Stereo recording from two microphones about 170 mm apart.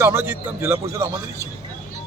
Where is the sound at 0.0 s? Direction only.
15° right (ahead or behind).